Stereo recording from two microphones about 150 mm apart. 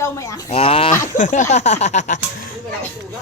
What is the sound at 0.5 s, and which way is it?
Speech, 40° left (ahead or behind).